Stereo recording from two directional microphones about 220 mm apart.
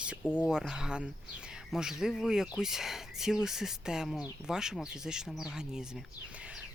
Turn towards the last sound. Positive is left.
turn(degrees=-5)  # may be behind; listen again after turning